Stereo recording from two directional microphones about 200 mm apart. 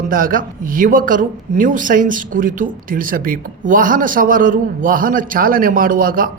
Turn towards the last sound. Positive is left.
turn(degrees=-45)  # may be behind; listen again after turning